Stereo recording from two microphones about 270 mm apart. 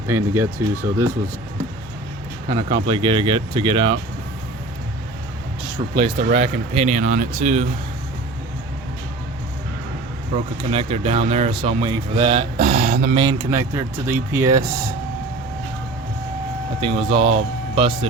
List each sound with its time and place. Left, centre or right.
0.1 s speech: centre
2.5 s speech: centre
5.9 s a man's voice: centre
10.7 s a man's voice: right
13.1 s speech: centre
16.8 s a man's voice: right